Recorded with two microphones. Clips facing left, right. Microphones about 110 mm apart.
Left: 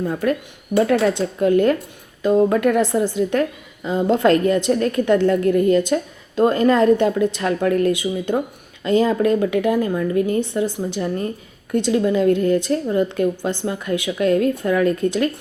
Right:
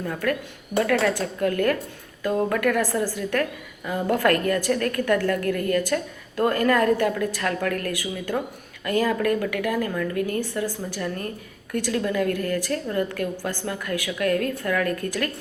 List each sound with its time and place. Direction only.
0.0 s a woman's voice: 25° left (ahead or behind)